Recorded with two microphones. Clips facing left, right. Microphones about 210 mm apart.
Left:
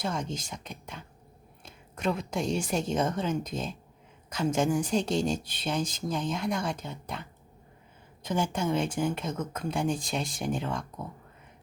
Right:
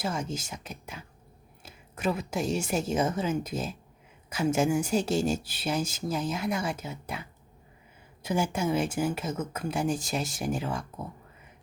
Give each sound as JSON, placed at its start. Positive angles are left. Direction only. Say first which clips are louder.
{"t": 0.0, "sound": "speech", "louder": "right 1 dB", "side_deg": -5}